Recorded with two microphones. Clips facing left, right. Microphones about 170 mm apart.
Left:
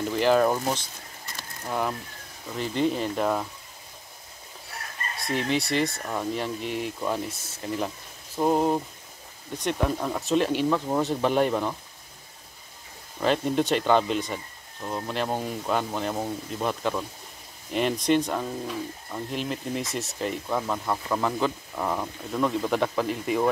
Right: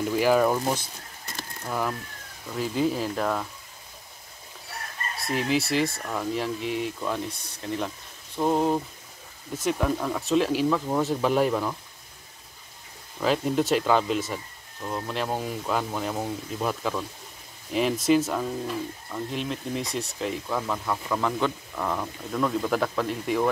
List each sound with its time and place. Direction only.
0.1 s speech: 5° right (ahead or behind)
5.2 s speech: centre (ahead or behind)
13.2 s speech: centre (ahead or behind)